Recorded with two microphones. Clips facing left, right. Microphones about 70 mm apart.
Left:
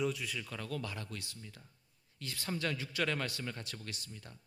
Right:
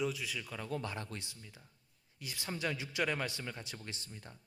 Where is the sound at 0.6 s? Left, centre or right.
Right.